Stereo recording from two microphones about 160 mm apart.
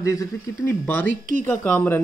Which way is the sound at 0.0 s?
20° left (ahead or behind).